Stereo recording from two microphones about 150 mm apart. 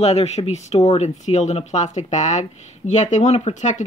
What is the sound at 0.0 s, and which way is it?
Speech, 45° left (ahead or behind).